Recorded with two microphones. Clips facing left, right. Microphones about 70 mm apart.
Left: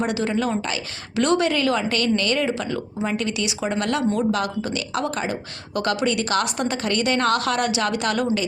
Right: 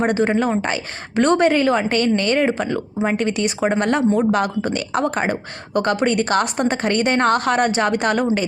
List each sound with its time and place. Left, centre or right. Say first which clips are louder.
0.0 s a woman's voice: right 5 dB; right